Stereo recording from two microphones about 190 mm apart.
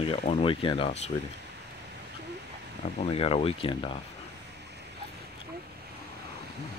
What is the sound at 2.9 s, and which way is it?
Speech, 30° left (ahead or behind).